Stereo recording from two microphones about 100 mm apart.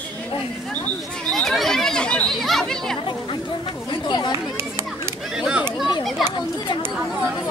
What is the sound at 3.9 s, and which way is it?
Chatter, 45° left (ahead or behind).